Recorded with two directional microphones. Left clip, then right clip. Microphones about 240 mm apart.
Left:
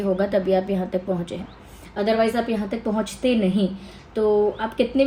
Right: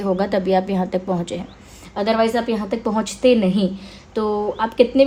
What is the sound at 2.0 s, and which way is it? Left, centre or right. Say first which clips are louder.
Speech: right 2 dB; right.